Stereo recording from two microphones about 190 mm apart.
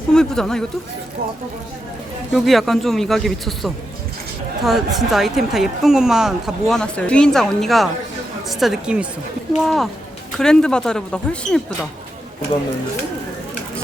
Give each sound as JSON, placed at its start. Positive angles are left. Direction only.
{"t": 0.1, "sound": "speech", "side_deg": 5}
{"t": 2.3, "sound": "speech", "side_deg": 0}